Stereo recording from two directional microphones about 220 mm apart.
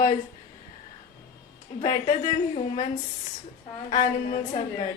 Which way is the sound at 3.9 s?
35° left (ahead or behind).